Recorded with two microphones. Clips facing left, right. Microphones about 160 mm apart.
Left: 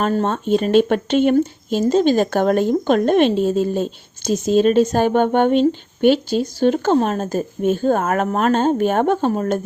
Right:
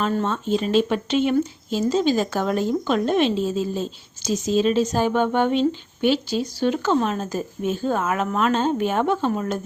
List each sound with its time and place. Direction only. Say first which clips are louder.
0.0 s speech: left 4 dB; 45° left (ahead or behind)